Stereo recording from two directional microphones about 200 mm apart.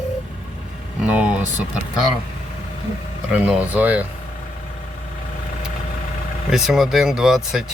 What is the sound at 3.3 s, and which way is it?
Speech, 5° right (ahead or behind).